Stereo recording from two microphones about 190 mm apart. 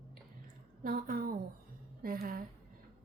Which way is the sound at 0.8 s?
50° right (ahead or behind).